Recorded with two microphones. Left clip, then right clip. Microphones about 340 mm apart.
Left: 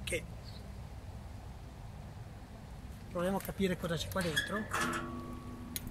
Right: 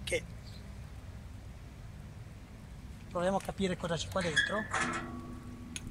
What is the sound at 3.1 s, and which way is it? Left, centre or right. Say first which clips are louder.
Speech: right 3 dB; centre.